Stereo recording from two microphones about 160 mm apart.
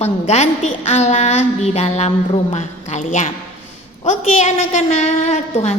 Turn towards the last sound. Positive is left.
turn(degrees=45)  # may be behind; listen again after turning